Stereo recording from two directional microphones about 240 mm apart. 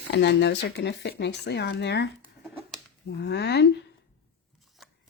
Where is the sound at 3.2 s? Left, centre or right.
Left.